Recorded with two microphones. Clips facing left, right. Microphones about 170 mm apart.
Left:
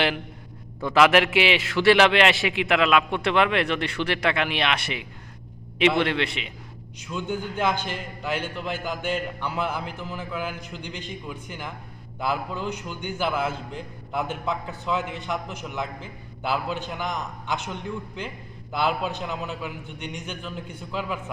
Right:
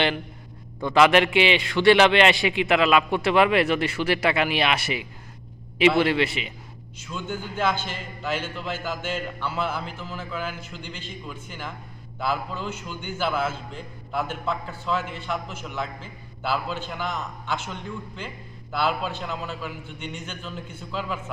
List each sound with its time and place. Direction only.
0.8 s a man's voice: centre (ahead or behind)
7.0 s a man's voice: 15° left (ahead or behind)